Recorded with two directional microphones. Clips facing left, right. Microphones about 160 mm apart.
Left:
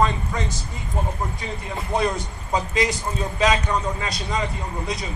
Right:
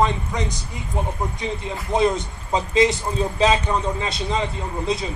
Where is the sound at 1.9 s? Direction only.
20° right (ahead or behind).